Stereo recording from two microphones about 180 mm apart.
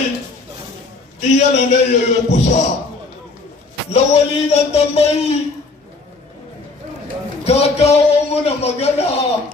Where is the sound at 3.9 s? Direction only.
35° left (ahead or behind).